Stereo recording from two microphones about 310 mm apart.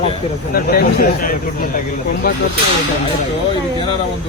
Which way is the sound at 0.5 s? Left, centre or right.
Left.